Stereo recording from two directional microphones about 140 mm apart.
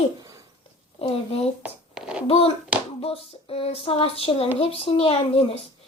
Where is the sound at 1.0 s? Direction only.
45° left (ahead or behind).